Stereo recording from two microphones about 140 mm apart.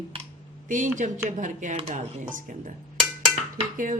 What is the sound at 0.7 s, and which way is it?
A woman's voice, 65° right (ahead or behind).